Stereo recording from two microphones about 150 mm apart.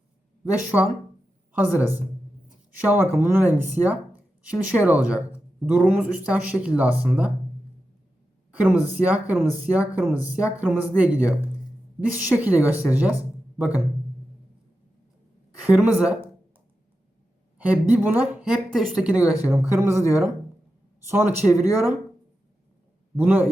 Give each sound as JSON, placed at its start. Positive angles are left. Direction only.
{"t": 0.7, "sound": "speech", "side_deg": -5}
{"t": 8.6, "sound": "speech", "side_deg": -10}
{"t": 15.6, "sound": "speech", "side_deg": -10}
{"t": 17.7, "sound": "speech", "side_deg": -10}
{"t": 23.1, "sound": "speech", "side_deg": -10}